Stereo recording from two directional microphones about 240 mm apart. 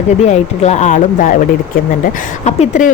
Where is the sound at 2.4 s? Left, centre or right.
Left.